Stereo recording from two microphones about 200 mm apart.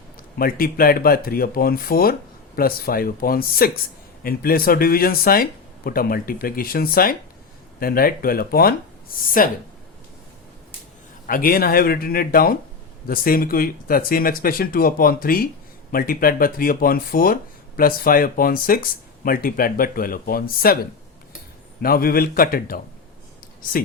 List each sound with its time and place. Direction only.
0.2 s speech: 45° left (ahead or behind)
11.3 s speech: 45° left (ahead or behind)
21.8 s speech: 45° left (ahead or behind)